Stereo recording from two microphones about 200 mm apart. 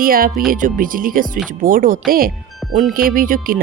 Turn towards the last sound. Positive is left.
turn(degrees=-45)  # may be behind; listen again after turning